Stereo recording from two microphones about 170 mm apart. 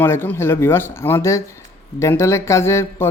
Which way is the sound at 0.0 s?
10° left (ahead or behind).